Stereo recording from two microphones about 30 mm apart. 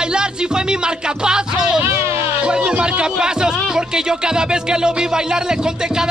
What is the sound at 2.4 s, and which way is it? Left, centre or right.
Music, right.